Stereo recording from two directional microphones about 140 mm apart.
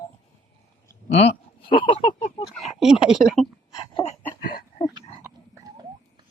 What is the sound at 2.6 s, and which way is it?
Speech, centre (ahead or behind).